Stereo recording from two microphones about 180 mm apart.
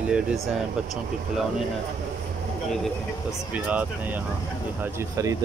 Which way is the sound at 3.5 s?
10° right (ahead or behind).